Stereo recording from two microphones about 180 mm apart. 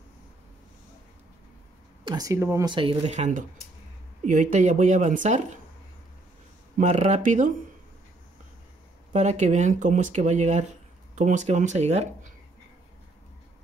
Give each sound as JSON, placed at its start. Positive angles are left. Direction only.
{"t": 2.0, "sound": "speech", "side_deg": -20}
{"t": 2.7, "sound": "speech", "side_deg": -30}
{"t": 6.8, "sound": "speech", "side_deg": -40}
{"t": 9.1, "sound": "speech", "side_deg": -40}